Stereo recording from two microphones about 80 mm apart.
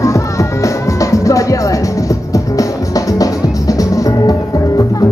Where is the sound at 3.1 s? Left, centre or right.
Left.